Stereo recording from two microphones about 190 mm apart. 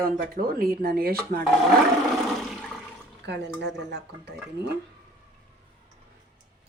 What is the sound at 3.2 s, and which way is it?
Speech, 65° right (ahead or behind).